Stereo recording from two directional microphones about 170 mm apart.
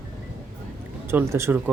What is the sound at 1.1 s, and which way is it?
Speech, 15° right (ahead or behind).